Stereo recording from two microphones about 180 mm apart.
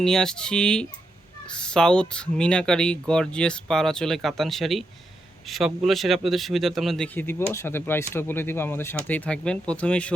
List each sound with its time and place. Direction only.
0.0 s speech: 5° left (ahead or behind)